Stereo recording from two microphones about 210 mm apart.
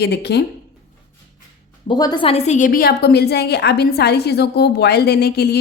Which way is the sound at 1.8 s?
20° left (ahead or behind).